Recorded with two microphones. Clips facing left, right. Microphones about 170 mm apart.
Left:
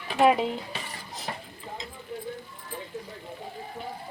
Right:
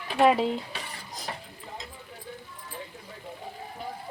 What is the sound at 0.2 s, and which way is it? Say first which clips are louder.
Speech: even; centre (ahead or behind).